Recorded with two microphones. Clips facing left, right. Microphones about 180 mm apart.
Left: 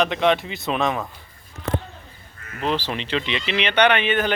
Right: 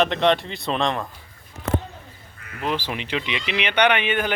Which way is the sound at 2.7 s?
10° right (ahead or behind).